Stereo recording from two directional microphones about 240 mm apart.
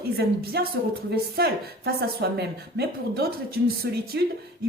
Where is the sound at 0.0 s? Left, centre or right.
Right.